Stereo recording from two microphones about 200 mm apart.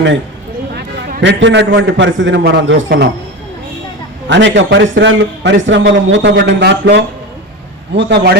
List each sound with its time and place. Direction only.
0.7 s a man's voice: 55° right (ahead or behind)
4.3 s a man's voice: 65° right (ahead or behind)